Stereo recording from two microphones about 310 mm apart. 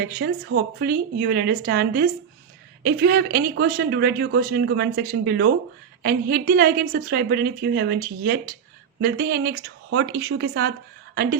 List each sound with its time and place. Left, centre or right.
0.0 s a woman's voice: right